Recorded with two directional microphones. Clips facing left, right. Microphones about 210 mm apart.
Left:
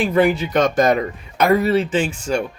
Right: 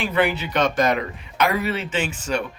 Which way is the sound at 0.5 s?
45° left (ahead or behind).